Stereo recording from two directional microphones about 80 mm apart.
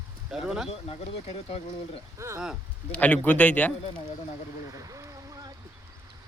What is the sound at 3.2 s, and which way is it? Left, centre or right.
Speech, centre.